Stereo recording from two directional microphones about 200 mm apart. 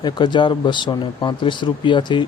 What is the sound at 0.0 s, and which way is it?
Speech, 20° left (ahead or behind).